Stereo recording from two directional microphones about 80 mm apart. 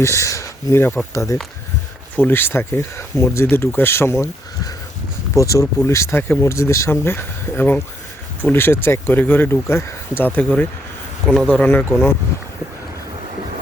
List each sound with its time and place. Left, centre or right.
0.0 s speech: left
2.1 s speech: left
5.4 s speech: left
11.3 s speech: centre